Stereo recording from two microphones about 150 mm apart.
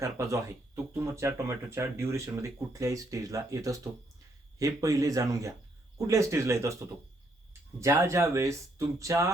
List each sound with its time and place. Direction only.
0.0 s speech: 20° right (ahead or behind)